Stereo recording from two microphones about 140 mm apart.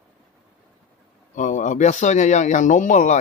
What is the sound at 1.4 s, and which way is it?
Speech, 60° left (ahead or behind).